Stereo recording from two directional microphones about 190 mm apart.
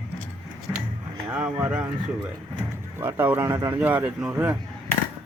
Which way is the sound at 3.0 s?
10° right (ahead or behind).